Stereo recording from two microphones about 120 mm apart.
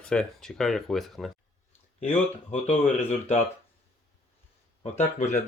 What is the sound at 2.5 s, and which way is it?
Speech, 65° left (ahead or behind).